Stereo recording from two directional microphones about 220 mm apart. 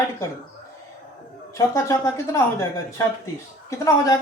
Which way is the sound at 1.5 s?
15° left (ahead or behind).